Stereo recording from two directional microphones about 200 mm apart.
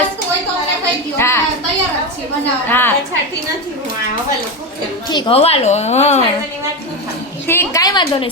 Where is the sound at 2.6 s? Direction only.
10° left (ahead or behind).